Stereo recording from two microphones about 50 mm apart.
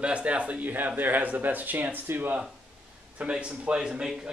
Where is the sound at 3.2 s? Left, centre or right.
Right.